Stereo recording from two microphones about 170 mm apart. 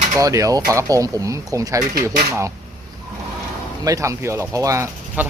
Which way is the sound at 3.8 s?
20° right (ahead or behind).